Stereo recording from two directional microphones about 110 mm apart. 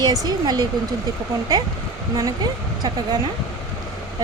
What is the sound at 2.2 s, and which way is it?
Speech, 35° right (ahead or behind).